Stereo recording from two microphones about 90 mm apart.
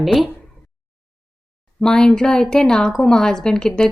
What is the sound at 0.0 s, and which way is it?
Speech, centre (ahead or behind).